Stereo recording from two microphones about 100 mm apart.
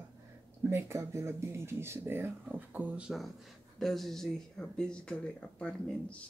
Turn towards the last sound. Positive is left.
turn(degrees=10)  # may be behind; listen again after turning